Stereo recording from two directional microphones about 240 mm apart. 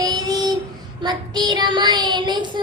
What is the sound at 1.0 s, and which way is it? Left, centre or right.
Child singing, centre.